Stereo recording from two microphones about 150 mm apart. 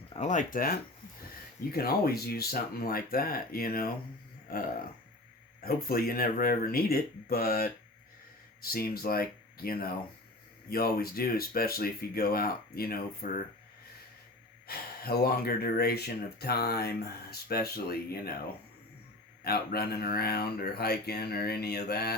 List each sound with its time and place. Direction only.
0.1 s speech: 50° left (ahead or behind); by 0.8 s 70° left (ahead or behind)
1.7 s speech: 90° left
5.6 s speech: 85° left
14.7 s speech: 90° left
19.5 s speech: 90° left